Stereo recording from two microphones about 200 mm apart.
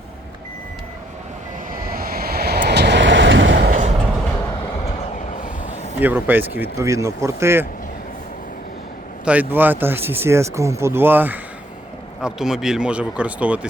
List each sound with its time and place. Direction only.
1.7 s vehicle: 45° right (ahead or behind)
4.9 s train: 35° left (ahead or behind)
6.0 s speech: 10° right (ahead or behind)
9.2 s speech: 10° right (ahead or behind)